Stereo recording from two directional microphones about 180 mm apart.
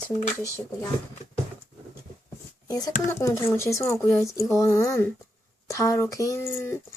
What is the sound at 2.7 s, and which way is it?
Speech, 20° left (ahead or behind).